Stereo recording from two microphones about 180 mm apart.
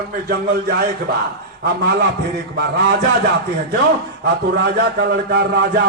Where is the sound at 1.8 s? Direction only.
65° right (ahead or behind).